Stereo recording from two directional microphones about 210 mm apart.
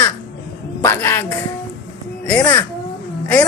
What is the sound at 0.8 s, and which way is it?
A woman's voice, 10° left (ahead or behind).